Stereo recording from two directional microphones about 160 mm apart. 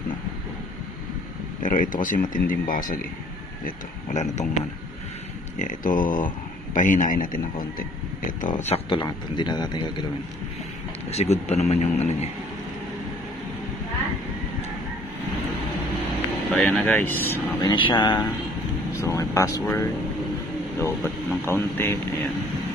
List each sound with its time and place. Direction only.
1.6 s speech: 60° left (ahead or behind)
3.6 s speech: 45° left (ahead or behind)
5.6 s a man's voice: 55° left (ahead or behind); by 10.0 s 25° left (ahead or behind)
11.1 s speech: 40° left (ahead or behind)
16.5 s speech: 5° left (ahead or behind)
17.6 s a man's voice: 30° left (ahead or behind)
21.5 s speech: 15° left (ahead or behind)